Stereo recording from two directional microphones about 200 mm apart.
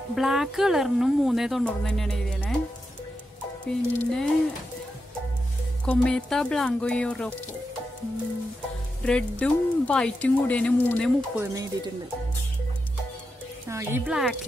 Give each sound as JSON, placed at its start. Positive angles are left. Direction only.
{"t": 0.1, "sound": "speech", "side_deg": 0}
{"t": 3.6, "sound": "speech", "side_deg": 5}
{"t": 5.9, "sound": "speech", "side_deg": 5}
{"t": 9.0, "sound": "speech", "side_deg": 5}
{"t": 11.3, "sound": "speech", "side_deg": -15}
{"t": 13.7, "sound": "speech", "side_deg": -10}